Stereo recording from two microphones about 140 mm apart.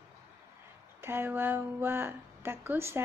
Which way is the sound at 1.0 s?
15° right (ahead or behind).